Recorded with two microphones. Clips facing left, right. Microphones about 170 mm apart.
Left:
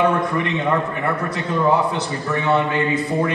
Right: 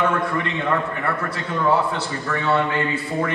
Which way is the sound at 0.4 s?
20° left (ahead or behind).